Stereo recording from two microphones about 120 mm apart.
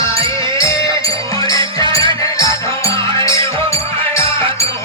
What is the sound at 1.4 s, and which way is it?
Music, 30° left (ahead or behind).